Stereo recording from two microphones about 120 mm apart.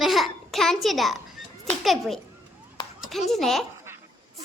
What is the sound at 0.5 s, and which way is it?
A child's voice, 5° left (ahead or behind).